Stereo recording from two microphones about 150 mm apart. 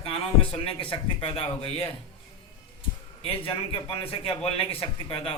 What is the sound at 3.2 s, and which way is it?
A man's voice, 40° left (ahead or behind).